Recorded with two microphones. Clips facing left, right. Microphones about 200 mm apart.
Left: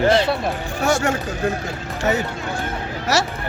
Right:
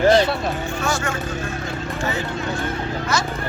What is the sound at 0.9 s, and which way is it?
Speech, 70° left (ahead or behind).